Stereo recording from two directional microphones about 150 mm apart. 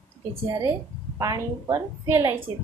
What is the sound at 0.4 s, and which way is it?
Speech, 20° right (ahead or behind).